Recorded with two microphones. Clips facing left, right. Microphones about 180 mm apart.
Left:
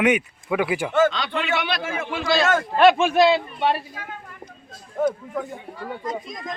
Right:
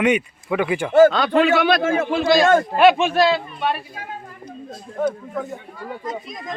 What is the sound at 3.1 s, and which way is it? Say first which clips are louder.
Speech: left 1 dB; 15° left (ahead or behind).